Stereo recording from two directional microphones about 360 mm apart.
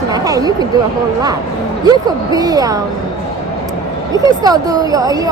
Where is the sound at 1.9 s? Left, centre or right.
Centre.